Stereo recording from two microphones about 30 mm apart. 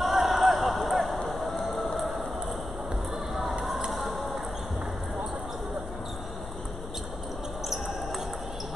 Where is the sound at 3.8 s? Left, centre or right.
Centre.